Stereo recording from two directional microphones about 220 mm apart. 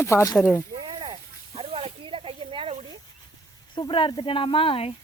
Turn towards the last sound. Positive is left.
turn(degrees=25)  # may be behind; listen again after turning